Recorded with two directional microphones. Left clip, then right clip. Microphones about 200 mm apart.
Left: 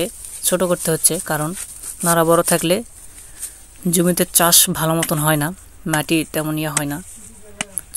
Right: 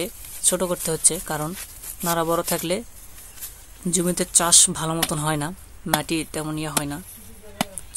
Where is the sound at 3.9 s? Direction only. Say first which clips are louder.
Left 5 dB; 25° left (ahead or behind).